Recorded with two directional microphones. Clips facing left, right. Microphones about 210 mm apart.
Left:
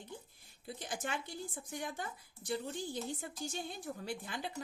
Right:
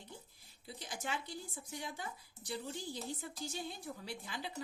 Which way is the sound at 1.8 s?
50° left (ahead or behind).